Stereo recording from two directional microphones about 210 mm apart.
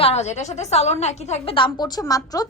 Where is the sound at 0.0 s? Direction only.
30° left (ahead or behind).